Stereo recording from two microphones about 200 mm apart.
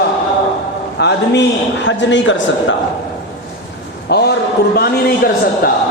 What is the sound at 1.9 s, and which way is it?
Speech, 65° left (ahead or behind).